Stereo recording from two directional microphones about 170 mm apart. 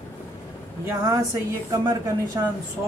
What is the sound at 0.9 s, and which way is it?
Speech, 15° right (ahead or behind).